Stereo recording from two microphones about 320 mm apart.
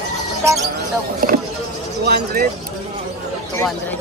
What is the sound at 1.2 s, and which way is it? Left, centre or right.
Speech, right.